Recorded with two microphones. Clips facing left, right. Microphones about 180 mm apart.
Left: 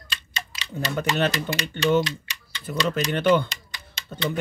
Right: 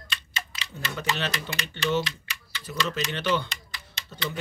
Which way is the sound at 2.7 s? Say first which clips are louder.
Left 5 dB; 50° left (ahead or behind).